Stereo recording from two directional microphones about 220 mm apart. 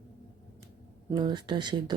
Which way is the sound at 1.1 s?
20° right (ahead or behind).